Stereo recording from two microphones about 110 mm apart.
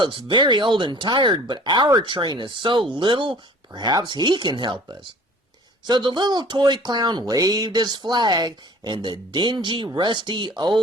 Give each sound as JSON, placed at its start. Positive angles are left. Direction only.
{"t": 0.0, "sound": "speech", "side_deg": -50}